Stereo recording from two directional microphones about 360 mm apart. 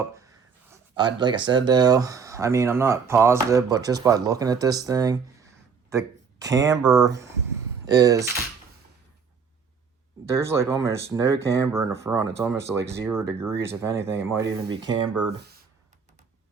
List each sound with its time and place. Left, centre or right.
0.7 s speech: centre
10.2 s speech: centre
15.4 s a sound: right